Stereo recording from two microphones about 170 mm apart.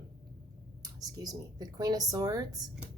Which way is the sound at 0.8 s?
20° right (ahead or behind).